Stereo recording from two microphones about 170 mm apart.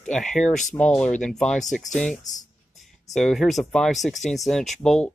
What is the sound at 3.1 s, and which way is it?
Speech, centre (ahead or behind).